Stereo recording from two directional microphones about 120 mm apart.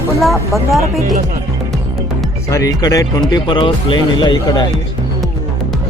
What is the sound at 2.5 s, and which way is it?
Speech, 30° left (ahead or behind).